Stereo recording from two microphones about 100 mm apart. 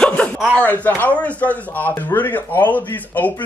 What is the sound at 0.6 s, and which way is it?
Speech, 15° left (ahead or behind).